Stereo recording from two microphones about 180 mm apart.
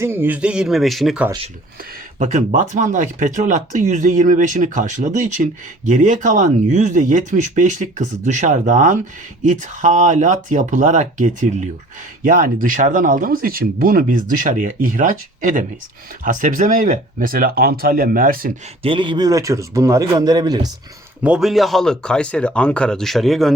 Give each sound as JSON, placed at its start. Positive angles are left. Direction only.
{"t": 0.0, "sound": "speech", "side_deg": -10}
{"t": 2.1, "sound": "speech", "side_deg": -45}
{"t": 18.8, "sound": "speech", "side_deg": -30}
{"t": 21.2, "sound": "speech", "side_deg": -5}